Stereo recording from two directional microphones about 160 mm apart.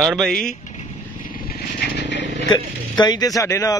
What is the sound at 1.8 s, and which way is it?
Vehicle, 90° left.